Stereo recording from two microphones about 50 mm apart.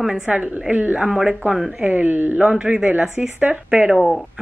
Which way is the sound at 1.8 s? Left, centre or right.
Right.